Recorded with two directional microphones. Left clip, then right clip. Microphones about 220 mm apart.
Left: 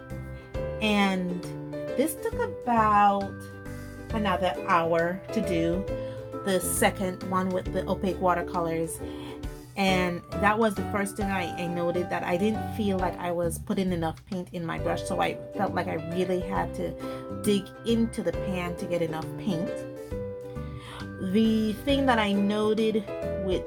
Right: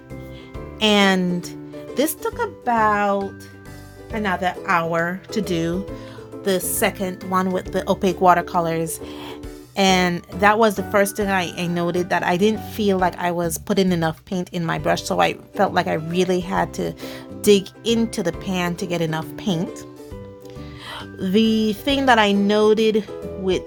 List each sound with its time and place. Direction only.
0.8 s speech: 45° right (ahead or behind)
2.6 s speech: 45° right (ahead or behind)
4.2 s speech: 40° right (ahead or behind)
21.3 s speech: 45° right (ahead or behind)